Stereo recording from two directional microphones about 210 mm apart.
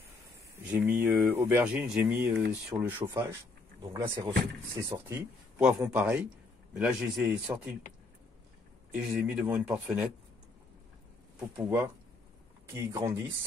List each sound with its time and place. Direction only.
0.7 s speech: 10° right (ahead or behind)
8.9 s speech: 10° right (ahead or behind)
11.3 s speech: 10° right (ahead or behind)